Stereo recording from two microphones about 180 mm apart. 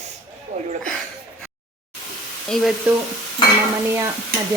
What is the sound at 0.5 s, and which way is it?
Speech, 35° right (ahead or behind).